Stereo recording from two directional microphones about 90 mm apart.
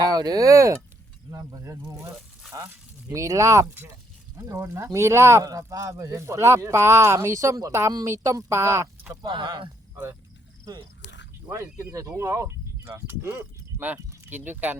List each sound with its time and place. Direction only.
0.0 s speech: 45° right (ahead or behind); by 5.5 s 30° right (ahead or behind)
5.5 s speech: 40° right (ahead or behind)
9.2 s speech: 60° right (ahead or behind)
11.4 s speech: 30° right (ahead or behind)
12.2 s a sound: 35° right (ahead or behind)
13.0 s speech: 25° right (ahead or behind)